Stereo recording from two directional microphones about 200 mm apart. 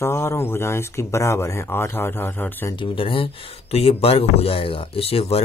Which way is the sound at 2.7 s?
25° left (ahead or behind).